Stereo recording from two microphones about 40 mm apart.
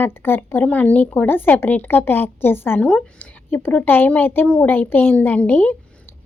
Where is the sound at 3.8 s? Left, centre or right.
Left.